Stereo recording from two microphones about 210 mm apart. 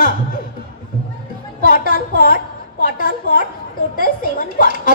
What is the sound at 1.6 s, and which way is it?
A woman's voice, 45° left (ahead or behind).